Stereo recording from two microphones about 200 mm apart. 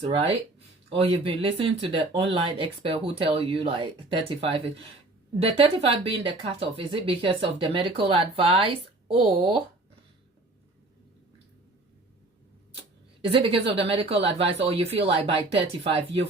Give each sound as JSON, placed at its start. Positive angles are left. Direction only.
{"t": 0.0, "sound": "speech", "side_deg": -25}
{"t": 13.3, "sound": "speech", "side_deg": -30}